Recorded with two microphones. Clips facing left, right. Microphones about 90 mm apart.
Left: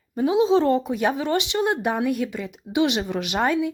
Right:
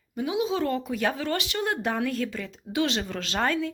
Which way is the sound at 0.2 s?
30° left (ahead or behind).